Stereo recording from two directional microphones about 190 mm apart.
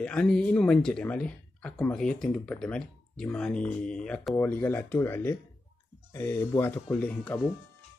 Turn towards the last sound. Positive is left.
turn(degrees=5)  # may be behind; listen again after turning